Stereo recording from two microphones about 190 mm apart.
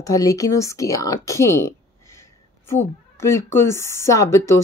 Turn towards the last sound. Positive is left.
turn(degrees=15)  # may be behind; listen again after turning